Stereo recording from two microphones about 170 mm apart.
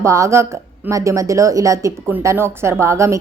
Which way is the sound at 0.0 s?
20° right (ahead or behind).